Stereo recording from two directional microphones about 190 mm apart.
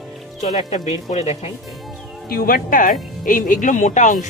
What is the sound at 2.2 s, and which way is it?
Speech, 50° left (ahead or behind).